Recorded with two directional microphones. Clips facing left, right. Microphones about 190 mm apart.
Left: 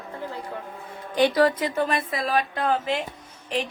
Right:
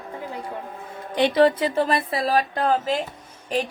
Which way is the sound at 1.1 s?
25° right (ahead or behind).